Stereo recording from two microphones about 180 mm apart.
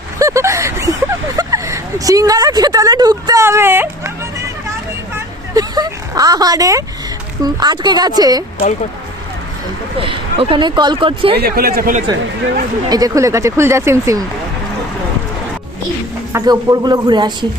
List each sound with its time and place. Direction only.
0.2 s a sound: 15° right (ahead or behind)
7.4 s speech: 25° right (ahead or behind)
10.0 s speech: 30° right (ahead or behind)
11.3 s a man's voice: 55° right (ahead or behind)
12.9 s speech: 20° right (ahead or behind)
16.3 s speech: 20° right (ahead or behind)